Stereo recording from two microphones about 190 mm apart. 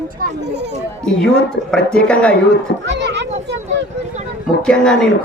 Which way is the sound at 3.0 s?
65° right (ahead or behind).